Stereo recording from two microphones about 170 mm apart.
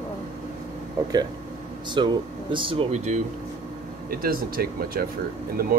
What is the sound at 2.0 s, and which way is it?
Speech, 30° right (ahead or behind).